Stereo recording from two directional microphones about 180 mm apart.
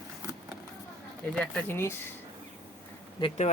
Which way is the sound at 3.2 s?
35° left (ahead or behind).